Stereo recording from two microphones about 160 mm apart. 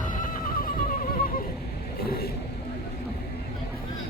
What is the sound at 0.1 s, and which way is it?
Neigh, 55° left (ahead or behind).